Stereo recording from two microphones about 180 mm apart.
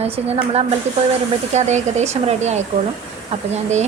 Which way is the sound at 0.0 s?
35° right (ahead or behind).